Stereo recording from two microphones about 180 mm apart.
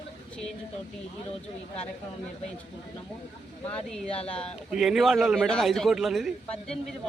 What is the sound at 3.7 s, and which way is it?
A man's voice, 5° left (ahead or behind).